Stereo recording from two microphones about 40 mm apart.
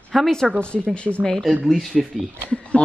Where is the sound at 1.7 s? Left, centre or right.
Centre.